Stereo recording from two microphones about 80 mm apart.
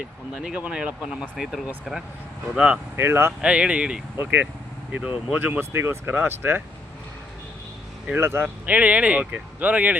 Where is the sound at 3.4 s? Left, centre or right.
Centre.